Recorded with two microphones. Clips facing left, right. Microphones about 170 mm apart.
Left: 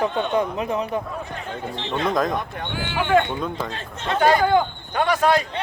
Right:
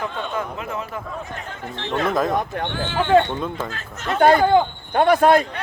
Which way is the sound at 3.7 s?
30° left (ahead or behind).